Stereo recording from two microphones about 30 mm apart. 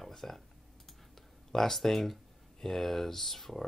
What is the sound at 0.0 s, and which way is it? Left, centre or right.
Computer keyboard, centre.